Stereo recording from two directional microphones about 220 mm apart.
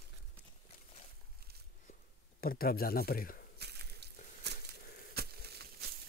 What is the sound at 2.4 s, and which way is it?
Speech, 40° left (ahead or behind).